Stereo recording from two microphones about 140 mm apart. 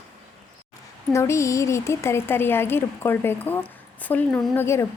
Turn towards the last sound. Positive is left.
turn(degrees=15)  # may be behind; listen again after turning